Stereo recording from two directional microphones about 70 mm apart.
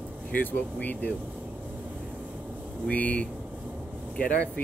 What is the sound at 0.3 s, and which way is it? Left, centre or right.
Speech, left.